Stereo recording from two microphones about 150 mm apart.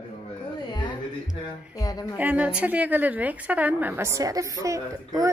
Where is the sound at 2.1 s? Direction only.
10° right (ahead or behind).